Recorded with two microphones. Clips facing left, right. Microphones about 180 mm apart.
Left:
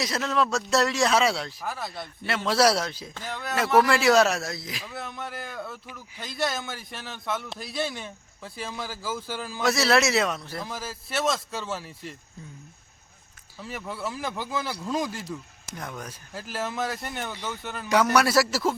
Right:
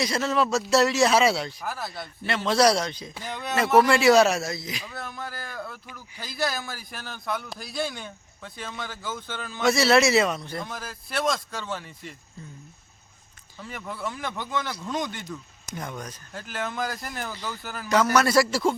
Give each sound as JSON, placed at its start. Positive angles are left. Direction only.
{"t": 0.0, "sound": "speech", "side_deg": 0}
{"t": 3.2, "sound": "speech", "side_deg": -15}
{"t": 3.5, "sound": "speech", "side_deg": 0}
{"t": 13.6, "sound": "speech", "side_deg": 5}